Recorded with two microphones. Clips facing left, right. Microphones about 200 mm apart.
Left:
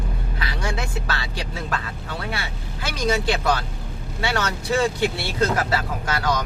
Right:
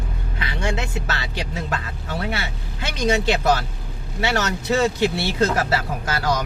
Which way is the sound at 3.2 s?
25° right (ahead or behind).